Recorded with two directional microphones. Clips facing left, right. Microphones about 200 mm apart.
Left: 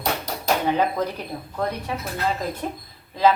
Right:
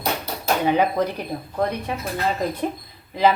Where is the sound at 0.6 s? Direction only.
10° right (ahead or behind).